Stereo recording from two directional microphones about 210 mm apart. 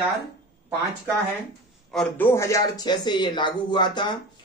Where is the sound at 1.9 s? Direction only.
5° left (ahead or behind).